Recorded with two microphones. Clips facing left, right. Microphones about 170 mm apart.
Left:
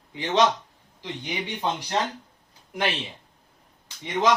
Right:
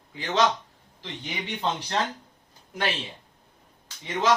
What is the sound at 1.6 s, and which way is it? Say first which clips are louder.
Speech: right 1 dB; 10° left (ahead or behind).